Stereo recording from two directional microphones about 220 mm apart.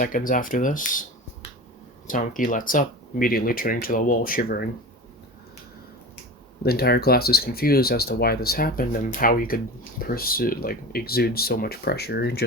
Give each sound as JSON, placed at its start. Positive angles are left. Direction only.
{"t": 0.0, "sound": "speech", "side_deg": 40}
{"t": 2.0, "sound": "speech", "side_deg": 35}
{"t": 6.6, "sound": "speech", "side_deg": 45}